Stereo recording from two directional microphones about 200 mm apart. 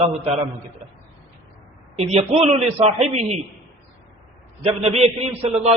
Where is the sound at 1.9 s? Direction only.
30° right (ahead or behind).